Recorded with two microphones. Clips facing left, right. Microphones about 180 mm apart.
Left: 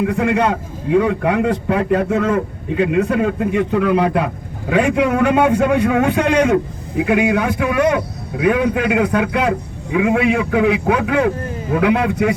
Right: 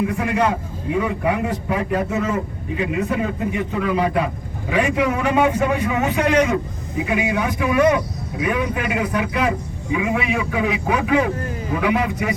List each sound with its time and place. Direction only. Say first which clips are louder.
0.0 s a man's voice: left 3 dB; 65° left (ahead or behind)